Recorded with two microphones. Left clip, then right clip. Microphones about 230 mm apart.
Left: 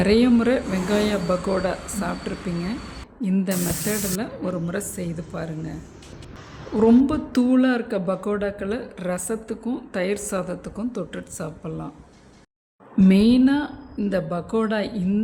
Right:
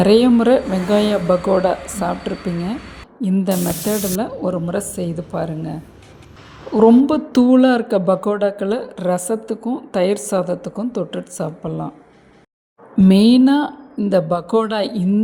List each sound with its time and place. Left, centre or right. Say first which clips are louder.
0.0 s speech: right 6 dB; centre
6.7 s speech: right 6 dB; centre
13.0 s speech: right 5 dB; centre